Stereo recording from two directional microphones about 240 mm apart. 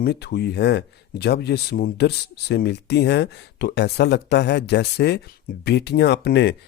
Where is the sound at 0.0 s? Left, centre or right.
Left.